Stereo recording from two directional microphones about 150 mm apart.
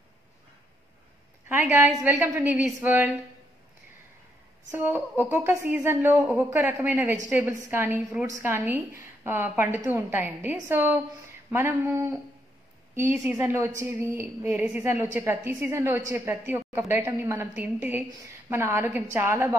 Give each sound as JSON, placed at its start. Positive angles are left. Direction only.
{"t": 1.5, "sound": "a woman's voice", "side_deg": -15}
{"t": 4.6, "sound": "a woman's voice", "side_deg": -15}
{"t": 13.2, "sound": "a woman's voice", "side_deg": -5}
{"t": 13.7, "sound": "a woman's voice", "side_deg": -15}